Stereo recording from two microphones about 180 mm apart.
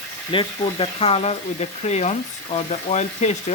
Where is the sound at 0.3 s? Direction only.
30° left (ahead or behind).